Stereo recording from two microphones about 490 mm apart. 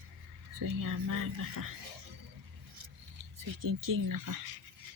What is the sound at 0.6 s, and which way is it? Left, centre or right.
Speech, right.